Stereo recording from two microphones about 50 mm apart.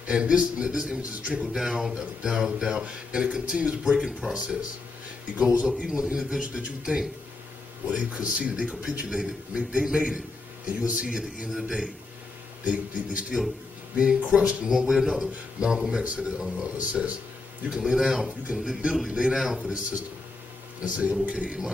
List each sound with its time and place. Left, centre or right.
0.0 s a man's voice: right
5.7 s a man's voice: centre
10.7 s a man's voice: right
14.9 s a man's voice: centre
19.0 s speech: centre
19.6 s a man's voice: right